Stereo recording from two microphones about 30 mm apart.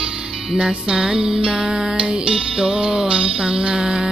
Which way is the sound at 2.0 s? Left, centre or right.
Right.